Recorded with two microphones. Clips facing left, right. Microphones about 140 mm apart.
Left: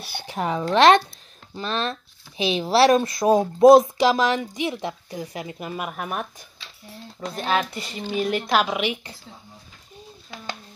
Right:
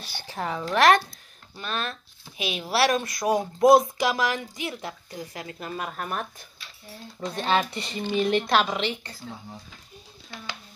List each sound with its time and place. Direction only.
0.3 s speech: 20° left (ahead or behind)